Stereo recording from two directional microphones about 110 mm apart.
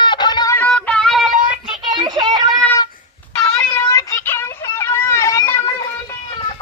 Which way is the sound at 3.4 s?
15° left (ahead or behind).